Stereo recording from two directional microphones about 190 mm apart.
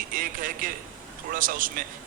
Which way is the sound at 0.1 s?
45° right (ahead or behind).